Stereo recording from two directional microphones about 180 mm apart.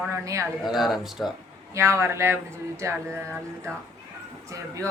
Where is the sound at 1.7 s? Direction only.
15° right (ahead or behind).